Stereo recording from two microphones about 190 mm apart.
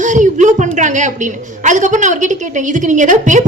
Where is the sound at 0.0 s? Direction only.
40° right (ahead or behind).